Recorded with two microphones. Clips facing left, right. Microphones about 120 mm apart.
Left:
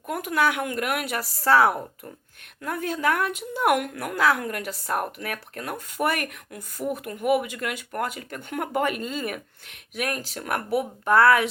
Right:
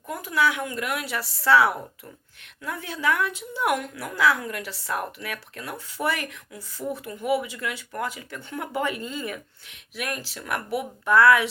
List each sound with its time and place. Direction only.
0.1 s a woman's voice: 55° left (ahead or behind)